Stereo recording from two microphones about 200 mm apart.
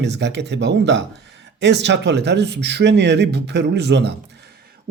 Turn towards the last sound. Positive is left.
turn(degrees=-60)  # may be behind; listen again after turning